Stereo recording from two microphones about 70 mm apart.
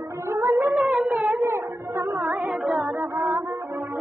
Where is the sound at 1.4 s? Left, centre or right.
Right.